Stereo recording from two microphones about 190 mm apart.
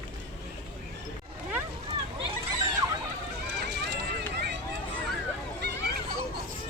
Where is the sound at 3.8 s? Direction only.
60° right (ahead or behind).